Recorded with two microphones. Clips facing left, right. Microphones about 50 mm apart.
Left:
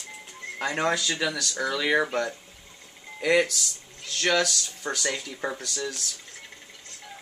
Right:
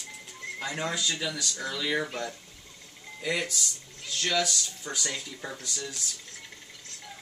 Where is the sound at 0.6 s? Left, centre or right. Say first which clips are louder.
Left 6 dB; left.